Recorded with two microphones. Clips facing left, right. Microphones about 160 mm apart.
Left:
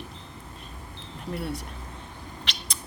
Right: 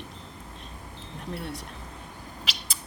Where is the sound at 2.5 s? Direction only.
5° right (ahead or behind).